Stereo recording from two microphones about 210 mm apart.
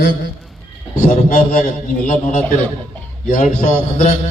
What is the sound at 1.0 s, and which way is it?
A man's voice, 35° left (ahead or behind).